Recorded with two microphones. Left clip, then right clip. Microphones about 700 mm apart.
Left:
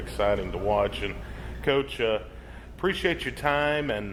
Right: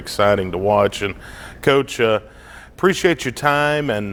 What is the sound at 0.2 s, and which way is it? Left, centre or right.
A man's voice, right.